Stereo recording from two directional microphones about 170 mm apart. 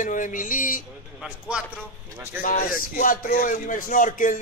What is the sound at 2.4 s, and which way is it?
A man's voice, 50° left (ahead or behind).